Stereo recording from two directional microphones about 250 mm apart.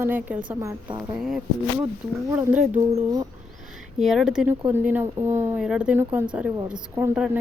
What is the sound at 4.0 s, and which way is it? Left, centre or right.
Speech, centre.